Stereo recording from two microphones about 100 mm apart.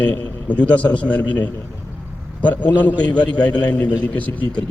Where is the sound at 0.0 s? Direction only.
15° left (ahead or behind).